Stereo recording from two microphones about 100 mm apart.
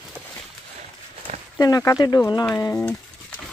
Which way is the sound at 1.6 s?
35° left (ahead or behind).